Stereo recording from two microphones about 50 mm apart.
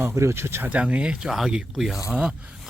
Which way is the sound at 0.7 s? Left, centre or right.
Right.